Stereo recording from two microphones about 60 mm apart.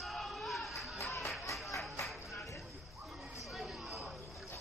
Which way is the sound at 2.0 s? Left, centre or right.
Centre.